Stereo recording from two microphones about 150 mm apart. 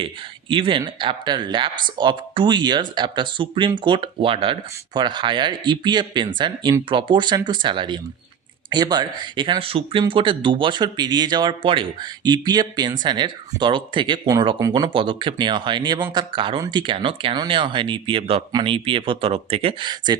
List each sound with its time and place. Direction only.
0.0 s speech: 35° right (ahead or behind)